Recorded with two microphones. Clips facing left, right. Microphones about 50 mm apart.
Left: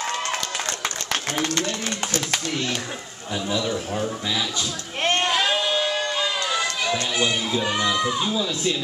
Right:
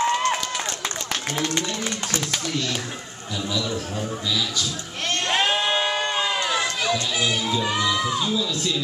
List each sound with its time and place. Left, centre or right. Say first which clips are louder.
2.3 s a man's voice: left 1 dB; left
5.3 s a sound: even; right
6.5 s run: right 1 dB; centre
8.2 s a man's voice: even; left